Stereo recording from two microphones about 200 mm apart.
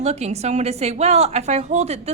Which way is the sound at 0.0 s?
35° right (ahead or behind).